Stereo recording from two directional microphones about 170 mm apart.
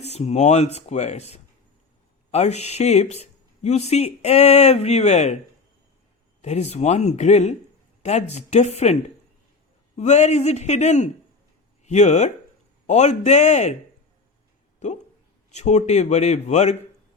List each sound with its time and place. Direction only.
0.0 s speech: 40° left (ahead or behind)
6.4 s speech: 40° left (ahead or behind)
15.5 s speech: 40° left (ahead or behind)